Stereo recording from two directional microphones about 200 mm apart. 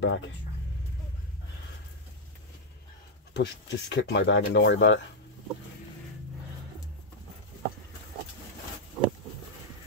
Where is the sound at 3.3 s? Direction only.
60° left (ahead or behind).